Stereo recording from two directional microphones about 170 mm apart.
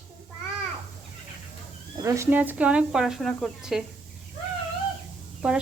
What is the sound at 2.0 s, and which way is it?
Speech, 15° right (ahead or behind).